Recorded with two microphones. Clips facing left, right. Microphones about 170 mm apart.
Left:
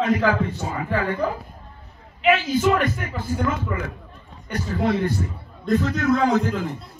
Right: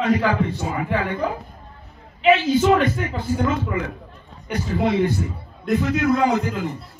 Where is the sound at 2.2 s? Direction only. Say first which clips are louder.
Right 3 dB; 25° right (ahead or behind).